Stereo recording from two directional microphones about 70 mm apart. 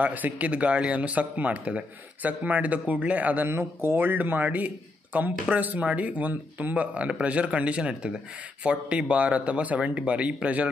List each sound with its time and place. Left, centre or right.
0.0 s a man's voice: right
3.4 s a man's voice: right; by 10.7 s centre